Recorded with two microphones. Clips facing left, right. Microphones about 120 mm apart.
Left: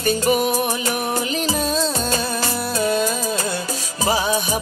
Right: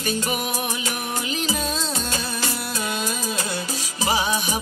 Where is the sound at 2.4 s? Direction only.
40° left (ahead or behind).